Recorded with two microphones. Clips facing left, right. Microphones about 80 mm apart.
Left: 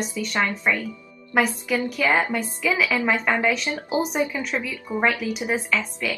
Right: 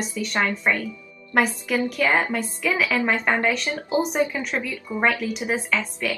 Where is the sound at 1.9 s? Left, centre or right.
Centre.